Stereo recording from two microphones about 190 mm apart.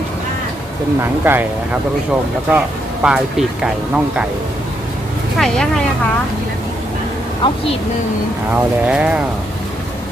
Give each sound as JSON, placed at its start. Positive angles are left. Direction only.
{"t": 1.2, "sound": "speech", "side_deg": -10}
{"t": 2.5, "sound": "speech", "side_deg": -5}
{"t": 5.4, "sound": "speech", "side_deg": 5}
{"t": 7.4, "sound": "a woman's voice", "side_deg": 25}
{"t": 8.9, "sound": "speech", "side_deg": -5}